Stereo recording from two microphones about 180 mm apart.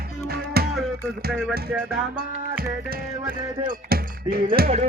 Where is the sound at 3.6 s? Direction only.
55° right (ahead or behind).